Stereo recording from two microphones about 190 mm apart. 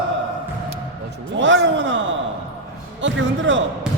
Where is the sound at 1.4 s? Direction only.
75° right (ahead or behind).